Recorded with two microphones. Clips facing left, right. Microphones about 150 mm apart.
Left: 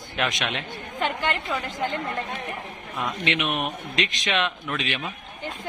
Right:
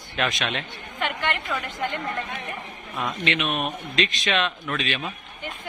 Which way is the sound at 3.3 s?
15° left (ahead or behind).